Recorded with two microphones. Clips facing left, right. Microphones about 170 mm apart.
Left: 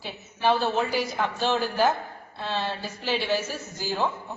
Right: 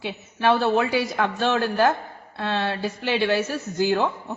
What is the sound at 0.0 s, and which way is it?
A man's voice, 65° right (ahead or behind).